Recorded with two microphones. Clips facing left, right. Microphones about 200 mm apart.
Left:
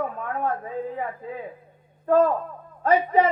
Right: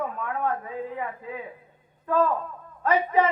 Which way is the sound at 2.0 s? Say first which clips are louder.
Left 5 dB; 45° left (ahead or behind).